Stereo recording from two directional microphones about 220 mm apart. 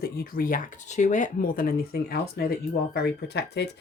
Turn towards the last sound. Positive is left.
turn(degrees=50)  # may be behind; listen again after turning